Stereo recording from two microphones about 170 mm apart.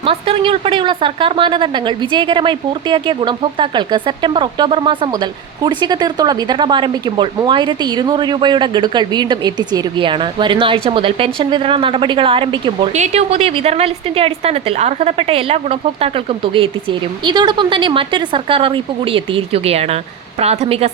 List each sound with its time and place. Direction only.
0.0 s a woman's voice: 30° right (ahead or behind)
17.2 s a woman's voice: 25° right (ahead or behind)